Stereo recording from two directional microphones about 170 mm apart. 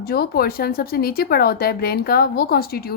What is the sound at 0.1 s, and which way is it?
A woman's voice, 65° left (ahead or behind).